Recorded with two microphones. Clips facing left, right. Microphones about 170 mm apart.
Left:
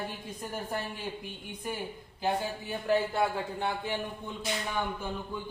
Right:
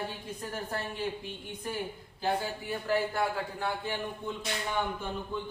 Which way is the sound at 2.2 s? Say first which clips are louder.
Even; 20° left (ahead or behind).